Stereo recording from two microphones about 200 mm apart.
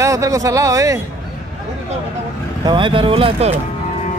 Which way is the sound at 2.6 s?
25° right (ahead or behind).